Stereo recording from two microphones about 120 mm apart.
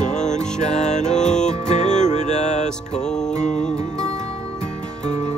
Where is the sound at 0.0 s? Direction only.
85° left.